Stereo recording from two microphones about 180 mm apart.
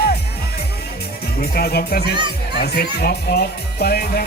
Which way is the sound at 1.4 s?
60° left (ahead or behind).